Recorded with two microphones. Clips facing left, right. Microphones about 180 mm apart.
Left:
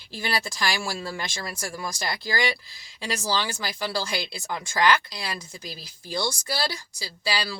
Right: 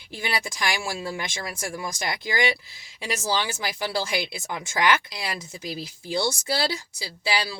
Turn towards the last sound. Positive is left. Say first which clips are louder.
# right 2 dB
turn(degrees=-20)  # may be behind; listen again after turning